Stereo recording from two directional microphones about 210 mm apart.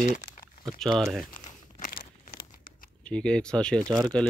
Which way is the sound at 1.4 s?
35° left (ahead or behind).